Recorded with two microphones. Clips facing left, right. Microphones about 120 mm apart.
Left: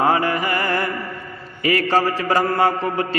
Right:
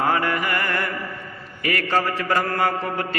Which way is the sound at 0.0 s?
20° left (ahead or behind).